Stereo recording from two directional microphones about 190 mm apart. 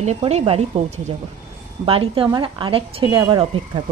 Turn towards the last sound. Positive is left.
turn(degrees=-25)  # may be behind; listen again after turning